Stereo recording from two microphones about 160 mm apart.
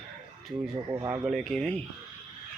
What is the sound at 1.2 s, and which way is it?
Speech, centre (ahead or behind).